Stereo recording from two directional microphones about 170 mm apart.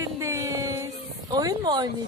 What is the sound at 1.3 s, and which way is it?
Speech, 25° right (ahead or behind).